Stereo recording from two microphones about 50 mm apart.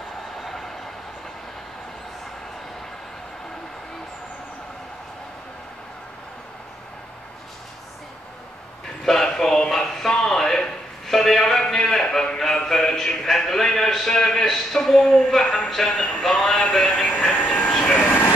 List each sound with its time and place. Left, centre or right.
0.4 s train: centre
9.0 s a man's voice: centre; by 17.7 s left
17.9 s vehicle: left